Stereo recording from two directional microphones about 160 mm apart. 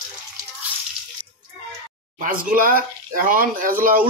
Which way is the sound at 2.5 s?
60° right (ahead or behind).